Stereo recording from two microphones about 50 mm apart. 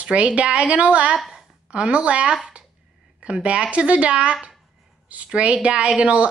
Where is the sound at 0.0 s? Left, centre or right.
Right.